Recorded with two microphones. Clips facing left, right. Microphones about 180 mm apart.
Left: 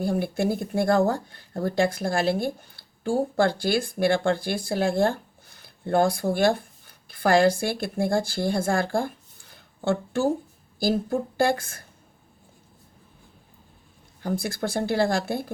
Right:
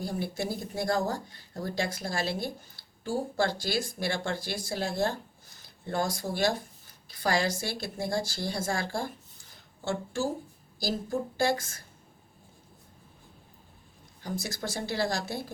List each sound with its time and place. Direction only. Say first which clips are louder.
0.0 s speech: left 8 dB; 55° left (ahead or behind)
14.2 s speech: left 7 dB; 55° left (ahead or behind)